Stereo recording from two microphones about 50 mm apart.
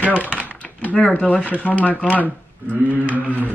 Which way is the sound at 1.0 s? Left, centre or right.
Left.